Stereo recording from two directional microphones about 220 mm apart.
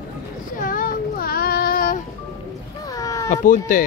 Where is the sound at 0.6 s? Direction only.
40° left (ahead or behind).